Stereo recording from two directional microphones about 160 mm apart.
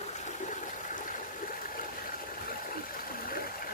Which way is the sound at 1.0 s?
55° left (ahead or behind).